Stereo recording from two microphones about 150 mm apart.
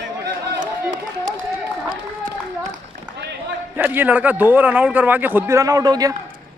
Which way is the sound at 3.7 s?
10° right (ahead or behind).